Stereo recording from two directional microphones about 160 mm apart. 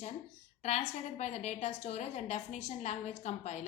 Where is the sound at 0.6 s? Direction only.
45° left (ahead or behind).